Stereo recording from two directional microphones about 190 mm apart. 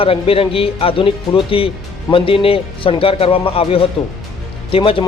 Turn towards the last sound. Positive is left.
turn(degrees=25)  # may be behind; listen again after turning